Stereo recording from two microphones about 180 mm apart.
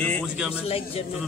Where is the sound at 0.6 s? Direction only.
35° left (ahead or behind).